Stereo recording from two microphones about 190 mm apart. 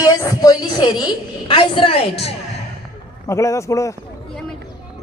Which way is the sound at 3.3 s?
15° left (ahead or behind).